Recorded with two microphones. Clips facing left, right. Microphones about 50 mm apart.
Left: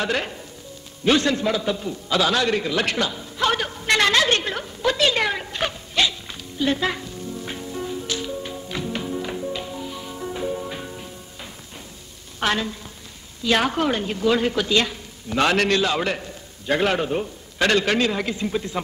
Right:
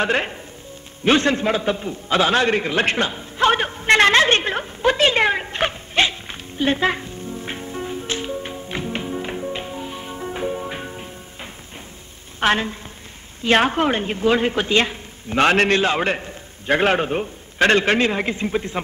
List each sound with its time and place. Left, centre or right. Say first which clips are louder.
0.0 s a woman's voice: right 4 dB; right
1.0 s a sound: right 2 dB; right
12.4 s a woman's voice: right 4 dB; right